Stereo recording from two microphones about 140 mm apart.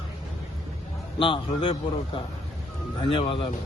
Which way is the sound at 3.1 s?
40° left (ahead or behind).